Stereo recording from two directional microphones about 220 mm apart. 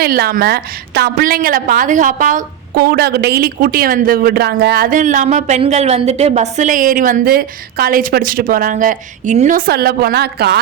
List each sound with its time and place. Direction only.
0.0 s a woman's voice: 45° right (ahead or behind)